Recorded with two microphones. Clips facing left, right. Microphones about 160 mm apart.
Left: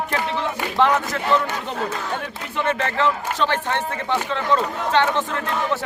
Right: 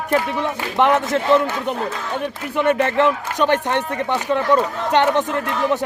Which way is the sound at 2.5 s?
15° right (ahead or behind).